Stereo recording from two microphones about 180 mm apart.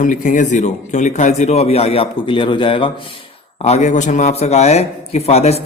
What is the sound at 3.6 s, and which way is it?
Speech, 40° left (ahead or behind).